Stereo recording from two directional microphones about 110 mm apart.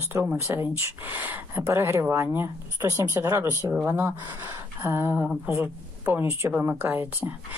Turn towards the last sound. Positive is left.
turn(degrees=-20)  # may be behind; listen again after turning